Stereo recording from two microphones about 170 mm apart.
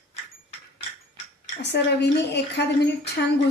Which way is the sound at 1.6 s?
80° left.